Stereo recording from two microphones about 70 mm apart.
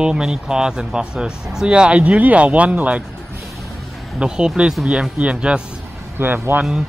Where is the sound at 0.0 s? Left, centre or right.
Centre.